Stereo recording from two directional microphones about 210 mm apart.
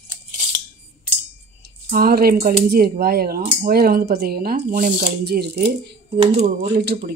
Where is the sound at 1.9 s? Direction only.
45° right (ahead or behind).